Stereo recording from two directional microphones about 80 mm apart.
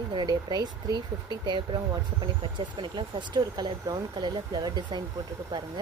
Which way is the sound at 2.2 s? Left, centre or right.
Right.